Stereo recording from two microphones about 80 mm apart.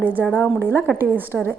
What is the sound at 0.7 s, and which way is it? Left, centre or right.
Speech, left.